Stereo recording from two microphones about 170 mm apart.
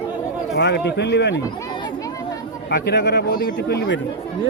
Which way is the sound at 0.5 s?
90° left.